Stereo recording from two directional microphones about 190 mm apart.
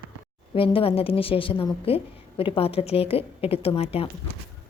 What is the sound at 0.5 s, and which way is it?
A woman's voice, 30° left (ahead or behind).